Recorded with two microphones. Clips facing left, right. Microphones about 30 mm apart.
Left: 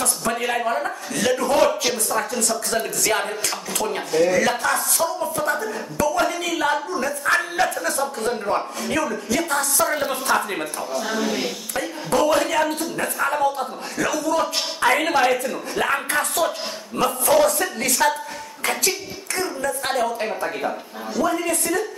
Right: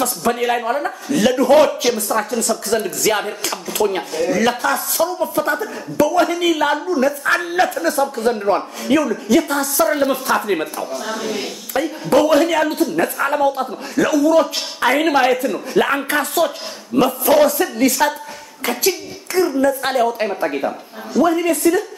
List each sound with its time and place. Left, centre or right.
0.0 s a woman's voice: centre
4.1 s a woman's voice: centre
10.8 s a woman's voice: centre